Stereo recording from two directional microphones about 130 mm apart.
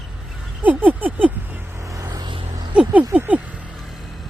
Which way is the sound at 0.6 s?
10° right (ahead or behind).